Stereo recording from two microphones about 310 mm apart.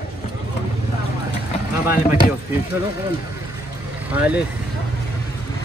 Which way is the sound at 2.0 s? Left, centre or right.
Left.